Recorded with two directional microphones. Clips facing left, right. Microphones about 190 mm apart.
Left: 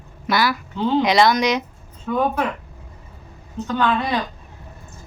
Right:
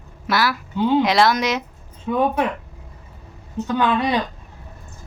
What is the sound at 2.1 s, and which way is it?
Speech, 15° right (ahead or behind).